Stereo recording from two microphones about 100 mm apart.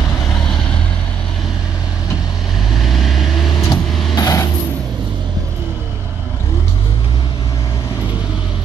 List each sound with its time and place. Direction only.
2.9 s vehicle: centre (ahead or behind)
3.6 s vehicle: 40° left (ahead or behind)